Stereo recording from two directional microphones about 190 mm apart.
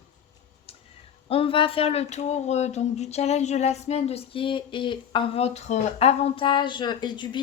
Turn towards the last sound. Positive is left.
turn(degrees=25)  # may be behind; listen again after turning